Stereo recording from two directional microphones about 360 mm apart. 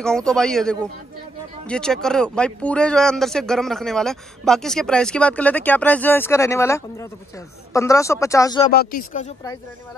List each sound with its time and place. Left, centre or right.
0.0 s speech: centre
8.6 s speech: left